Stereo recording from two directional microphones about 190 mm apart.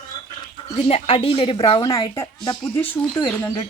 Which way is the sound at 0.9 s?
30° left (ahead or behind).